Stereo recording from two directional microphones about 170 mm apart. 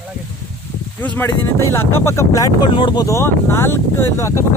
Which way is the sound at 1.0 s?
15° left (ahead or behind).